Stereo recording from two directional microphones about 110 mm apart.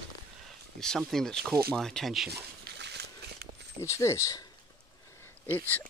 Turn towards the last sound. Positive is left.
turn(degrees=20)  # may be behind; listen again after turning